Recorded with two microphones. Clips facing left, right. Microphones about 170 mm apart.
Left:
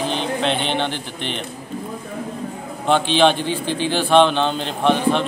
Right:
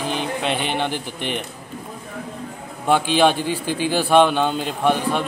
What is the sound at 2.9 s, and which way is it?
A man's voice, 10° right (ahead or behind).